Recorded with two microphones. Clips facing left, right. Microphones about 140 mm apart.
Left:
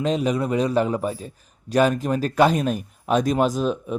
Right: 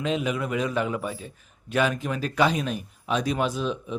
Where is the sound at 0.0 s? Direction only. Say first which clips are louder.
Left 5 dB; 40° left (ahead or behind).